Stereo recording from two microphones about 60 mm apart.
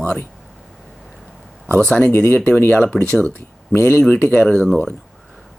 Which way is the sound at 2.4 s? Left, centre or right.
Left.